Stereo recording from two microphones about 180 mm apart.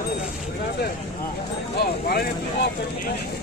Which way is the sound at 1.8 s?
60° left (ahead or behind).